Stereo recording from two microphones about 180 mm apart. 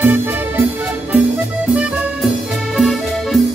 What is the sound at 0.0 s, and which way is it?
Music, 10° right (ahead or behind).